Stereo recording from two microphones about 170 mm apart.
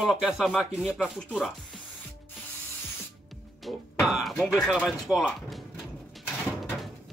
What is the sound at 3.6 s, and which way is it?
Speech, centre (ahead or behind).